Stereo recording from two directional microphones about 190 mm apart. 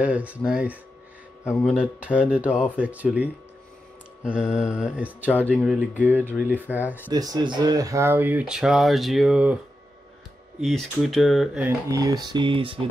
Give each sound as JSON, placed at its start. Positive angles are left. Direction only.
{"t": 0.0, "sound": "speech", "side_deg": -5}
{"t": 1.4, "sound": "speech", "side_deg": 15}
{"t": 1.7, "sound": "speech", "side_deg": -5}
{"t": 4.2, "sound": "mantra", "side_deg": -5}
{"t": 5.3, "sound": "mantra", "side_deg": 5}
{"t": 6.0, "sound": "speech", "side_deg": -10}
{"t": 7.1, "sound": "speech", "side_deg": -20}
{"t": 10.6, "sound": "mantra", "side_deg": 0}
{"t": 11.9, "sound": "speech", "side_deg": -20}